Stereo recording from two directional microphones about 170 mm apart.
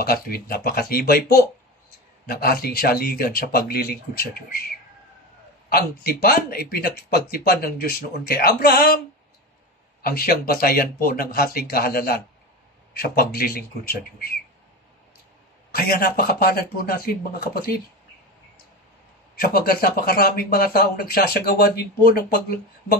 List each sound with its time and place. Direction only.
0.0 s speech: 65° left (ahead or behind)
5.7 s speech: 65° left (ahead or behind)
10.0 s speech: 60° left (ahead or behind)
15.7 s speech: 65° left (ahead or behind)
19.4 s speech: 60° left (ahead or behind)